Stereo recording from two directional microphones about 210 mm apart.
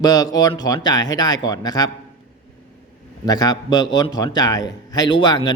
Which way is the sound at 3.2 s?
20° left (ahead or behind).